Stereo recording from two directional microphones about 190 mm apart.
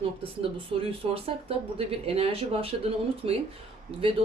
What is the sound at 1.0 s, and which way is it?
Speech, 30° right (ahead or behind).